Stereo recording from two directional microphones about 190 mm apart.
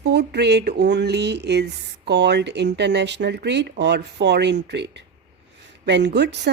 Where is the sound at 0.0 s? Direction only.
60° right (ahead or behind).